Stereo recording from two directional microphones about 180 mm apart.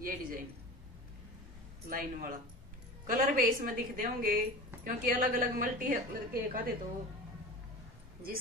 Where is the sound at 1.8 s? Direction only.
50° right (ahead or behind).